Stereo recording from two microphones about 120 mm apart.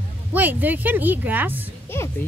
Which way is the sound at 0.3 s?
15° right (ahead or behind).